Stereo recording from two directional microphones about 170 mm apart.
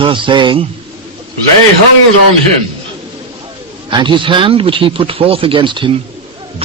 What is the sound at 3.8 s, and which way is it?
Speech, 30° right (ahead or behind).